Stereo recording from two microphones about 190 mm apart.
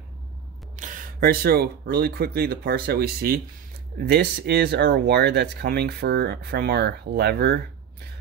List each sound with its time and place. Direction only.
0.7 s speech: 45° right (ahead or behind); by 8.1 s 60° right (ahead or behind)